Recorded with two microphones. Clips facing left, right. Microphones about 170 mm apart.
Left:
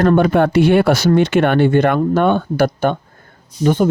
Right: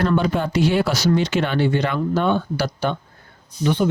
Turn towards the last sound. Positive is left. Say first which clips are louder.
# left 5 dB
turn(degrees=45)  # may be behind; listen again after turning